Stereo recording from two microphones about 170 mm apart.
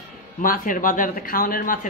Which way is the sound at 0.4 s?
55° left (ahead or behind).